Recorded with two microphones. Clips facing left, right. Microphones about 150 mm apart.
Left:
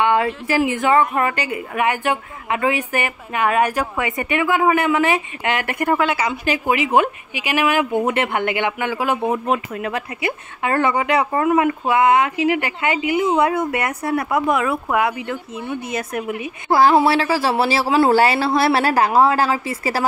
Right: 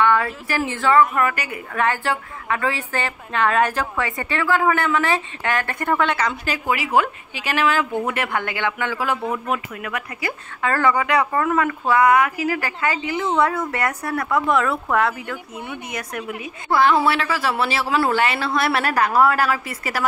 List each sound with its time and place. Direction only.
0.0 s a woman's voice: 20° left (ahead or behind)